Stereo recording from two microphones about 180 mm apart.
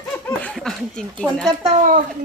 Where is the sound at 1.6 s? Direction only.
45° right (ahead or behind).